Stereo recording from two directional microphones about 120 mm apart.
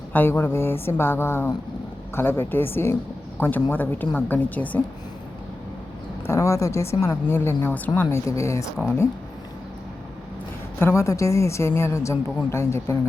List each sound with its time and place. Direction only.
0.1 s a woman's voice: 15° left (ahead or behind)
6.2 s a woman's voice: 25° left (ahead or behind)
10.8 s a woman's voice: 20° left (ahead or behind)